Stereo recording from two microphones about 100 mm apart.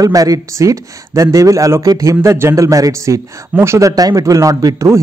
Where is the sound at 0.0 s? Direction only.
35° right (ahead or behind).